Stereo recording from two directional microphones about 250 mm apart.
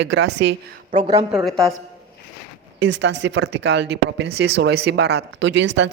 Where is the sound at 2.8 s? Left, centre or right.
Right.